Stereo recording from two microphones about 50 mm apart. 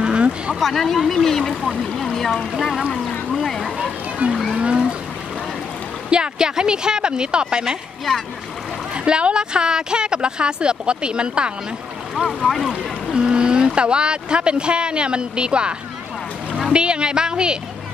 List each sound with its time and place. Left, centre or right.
0.0 s a sound: right
0.6 s speech: centre
3.8 s a woman's voice: centre
6.0 s a woman's voice: centre
8.9 s a woman's voice: right
12.4 s speech: centre
13.1 s speech: centre
16.7 s a woman's voice: centre